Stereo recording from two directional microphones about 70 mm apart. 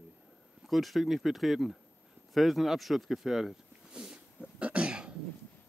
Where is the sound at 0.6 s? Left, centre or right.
Centre.